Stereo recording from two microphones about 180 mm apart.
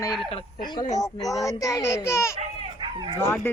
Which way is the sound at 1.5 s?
20° left (ahead or behind).